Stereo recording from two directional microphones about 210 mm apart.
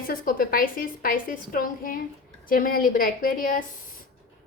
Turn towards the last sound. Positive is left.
turn(degrees=40)  # may be behind; listen again after turning